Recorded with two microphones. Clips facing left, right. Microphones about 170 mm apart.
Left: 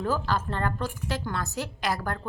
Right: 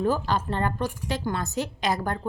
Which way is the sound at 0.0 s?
20° right (ahead or behind).